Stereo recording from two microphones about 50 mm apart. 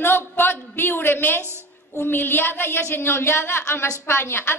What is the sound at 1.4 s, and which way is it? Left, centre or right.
Speech, right.